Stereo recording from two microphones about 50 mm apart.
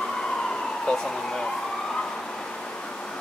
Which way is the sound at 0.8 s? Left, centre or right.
Centre.